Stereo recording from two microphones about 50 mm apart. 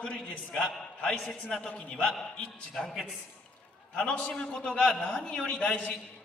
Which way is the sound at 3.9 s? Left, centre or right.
Left.